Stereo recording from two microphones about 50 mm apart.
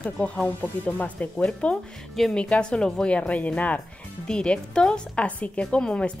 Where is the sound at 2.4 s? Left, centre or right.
Left.